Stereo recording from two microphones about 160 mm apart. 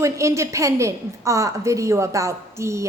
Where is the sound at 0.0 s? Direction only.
20° right (ahead or behind).